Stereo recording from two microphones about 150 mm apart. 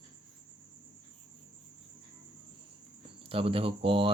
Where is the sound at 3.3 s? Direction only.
40° right (ahead or behind).